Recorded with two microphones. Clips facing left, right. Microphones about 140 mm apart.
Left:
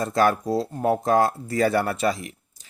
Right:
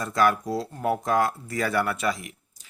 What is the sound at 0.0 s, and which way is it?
A man's voice, 30° left (ahead or behind).